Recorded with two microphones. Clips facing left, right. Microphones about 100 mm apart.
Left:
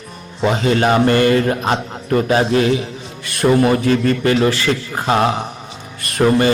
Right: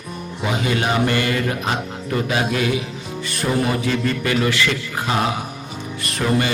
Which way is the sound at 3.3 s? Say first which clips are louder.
Left 8 dB; 55° left (ahead or behind).